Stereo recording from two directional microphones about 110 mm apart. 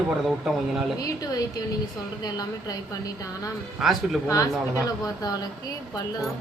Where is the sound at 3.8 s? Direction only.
Centre (ahead or behind).